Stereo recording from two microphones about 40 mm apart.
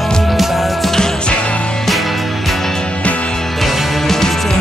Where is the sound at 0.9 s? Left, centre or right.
Centre.